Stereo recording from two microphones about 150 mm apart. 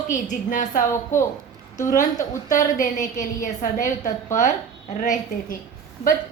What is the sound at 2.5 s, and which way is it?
A woman's voice, 60° left (ahead or behind).